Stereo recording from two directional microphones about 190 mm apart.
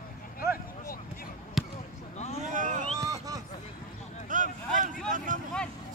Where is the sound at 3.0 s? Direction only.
20° right (ahead or behind).